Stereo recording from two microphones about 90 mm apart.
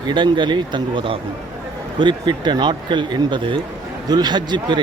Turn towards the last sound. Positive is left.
turn(degrees=-60)  # may be behind; listen again after turning